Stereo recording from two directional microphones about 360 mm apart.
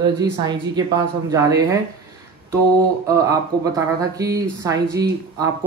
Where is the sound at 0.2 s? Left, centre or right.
Centre.